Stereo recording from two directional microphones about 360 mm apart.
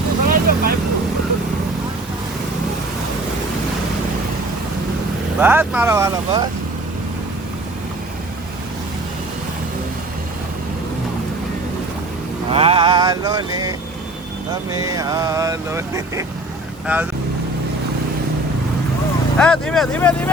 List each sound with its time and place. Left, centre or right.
0.3 s vehicle: right
5.4 s vehicle: centre
12.5 s vehicle: centre
14.8 s vehicle: centre
16.8 s speech: centre
19.4 s speech: centre